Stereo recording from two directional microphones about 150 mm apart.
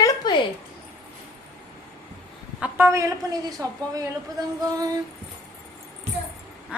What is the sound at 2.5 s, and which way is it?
Speech, 10° right (ahead or behind).